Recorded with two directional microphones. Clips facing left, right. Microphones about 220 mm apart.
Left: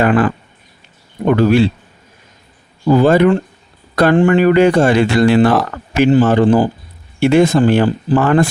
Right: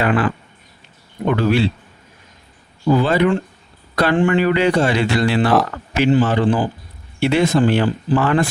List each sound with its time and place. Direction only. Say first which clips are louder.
0.0 s speech: left 5 dB; 45° left (ahead or behind)
2.8 s speech: left 5 dB; 45° left (ahead or behind)